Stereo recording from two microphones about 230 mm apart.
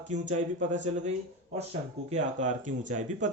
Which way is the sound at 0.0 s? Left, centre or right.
Right.